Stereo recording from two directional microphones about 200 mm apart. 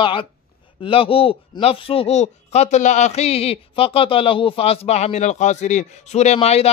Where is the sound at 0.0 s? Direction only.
25° left (ahead or behind).